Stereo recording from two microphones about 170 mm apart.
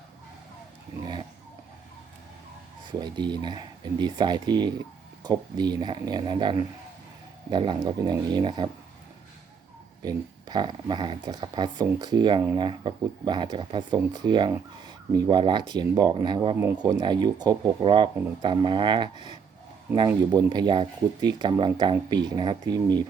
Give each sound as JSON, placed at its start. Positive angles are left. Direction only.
{"t": 3.0, "sound": "speech", "side_deg": -25}
{"t": 10.0, "sound": "speech", "side_deg": -25}
{"t": 20.3, "sound": "speech", "side_deg": -25}